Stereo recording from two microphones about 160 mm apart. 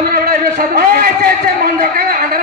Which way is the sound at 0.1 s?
75° right (ahead or behind).